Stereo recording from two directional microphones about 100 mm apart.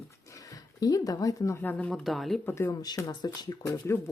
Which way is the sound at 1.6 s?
15° left (ahead or behind).